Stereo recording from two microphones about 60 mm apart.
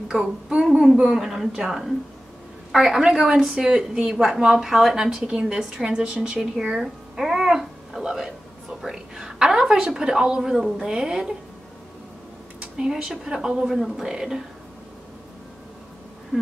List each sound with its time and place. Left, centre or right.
0.1 s a woman's voice: centre
12.7 s a woman's voice: centre